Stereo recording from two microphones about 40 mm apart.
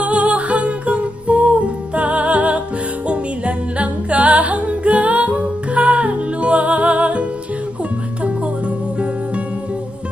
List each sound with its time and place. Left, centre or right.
0.0 s music: right